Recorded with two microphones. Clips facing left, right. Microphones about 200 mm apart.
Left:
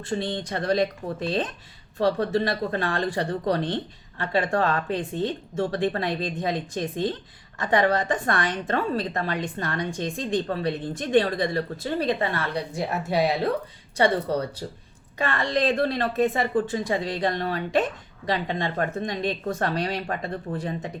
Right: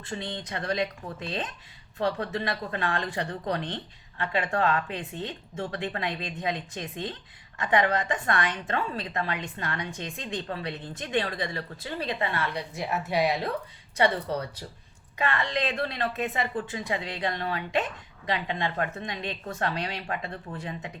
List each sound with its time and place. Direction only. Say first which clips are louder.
0.1 s a woman's voice: left 7 dB; 35° left (ahead or behind)